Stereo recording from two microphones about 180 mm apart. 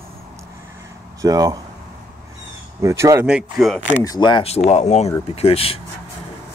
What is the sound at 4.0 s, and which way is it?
Speech, 20° left (ahead or behind).